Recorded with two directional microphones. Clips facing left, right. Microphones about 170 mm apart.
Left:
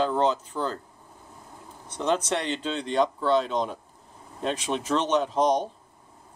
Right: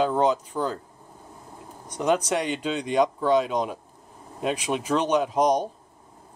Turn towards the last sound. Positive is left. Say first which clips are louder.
# right 1 dB
turn(degrees=-10)  # may be behind; listen again after turning